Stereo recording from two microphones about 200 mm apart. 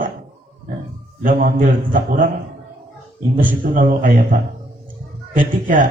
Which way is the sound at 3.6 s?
40° right (ahead or behind).